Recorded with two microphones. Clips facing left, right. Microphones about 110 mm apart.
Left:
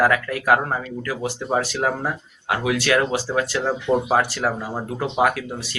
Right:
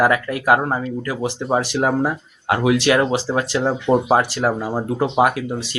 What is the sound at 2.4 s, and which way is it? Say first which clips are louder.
Speech: right 5 dB; 30° right (ahead or behind).